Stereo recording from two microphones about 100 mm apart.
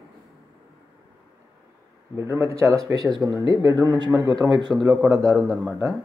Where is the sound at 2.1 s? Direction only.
30° right (ahead or behind); by 4.8 s 45° right (ahead or behind).